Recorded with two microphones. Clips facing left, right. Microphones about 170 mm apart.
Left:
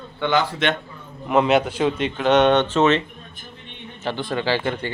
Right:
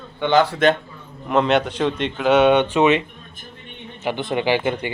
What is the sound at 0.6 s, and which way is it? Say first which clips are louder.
Speech: right 6 dB; 50° right (ahead or behind).